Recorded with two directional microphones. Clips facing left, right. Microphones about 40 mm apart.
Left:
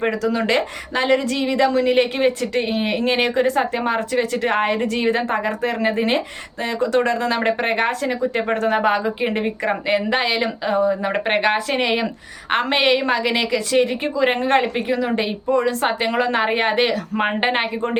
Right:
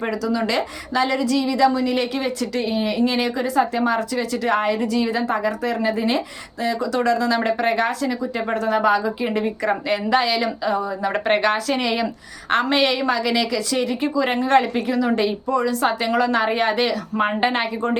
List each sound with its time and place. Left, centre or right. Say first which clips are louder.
0.0 s a woman's voice: left 2 dB; left